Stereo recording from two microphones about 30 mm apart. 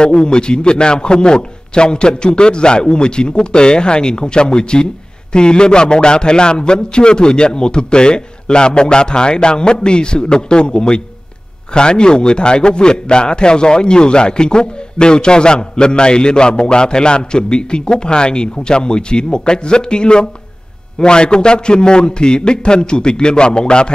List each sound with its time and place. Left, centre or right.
0.0 s a man's voice: left